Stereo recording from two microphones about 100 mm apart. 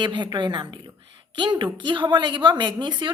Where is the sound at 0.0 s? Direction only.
50° right (ahead or behind).